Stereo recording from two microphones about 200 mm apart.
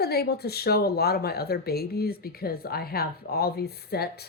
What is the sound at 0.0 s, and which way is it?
Speech, 55° left (ahead or behind).